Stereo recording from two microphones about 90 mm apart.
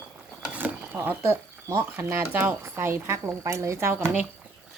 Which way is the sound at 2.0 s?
25° right (ahead or behind).